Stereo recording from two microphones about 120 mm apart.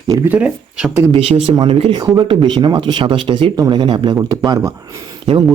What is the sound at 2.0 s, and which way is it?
Speech, 35° right (ahead or behind).